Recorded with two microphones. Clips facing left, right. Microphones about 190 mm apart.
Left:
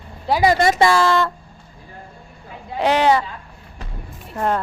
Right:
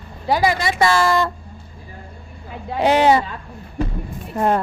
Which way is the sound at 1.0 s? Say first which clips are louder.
Even; 15° right (ahead or behind).